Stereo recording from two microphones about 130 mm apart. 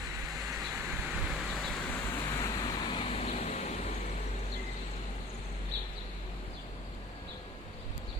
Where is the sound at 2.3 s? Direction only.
30° left (ahead or behind).